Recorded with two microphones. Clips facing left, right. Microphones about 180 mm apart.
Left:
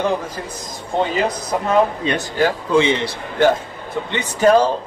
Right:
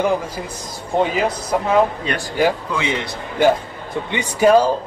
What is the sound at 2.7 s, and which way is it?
Speech, 30° left (ahead or behind).